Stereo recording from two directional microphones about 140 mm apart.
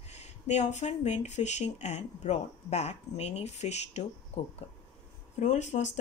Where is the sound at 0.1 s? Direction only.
55° left (ahead or behind).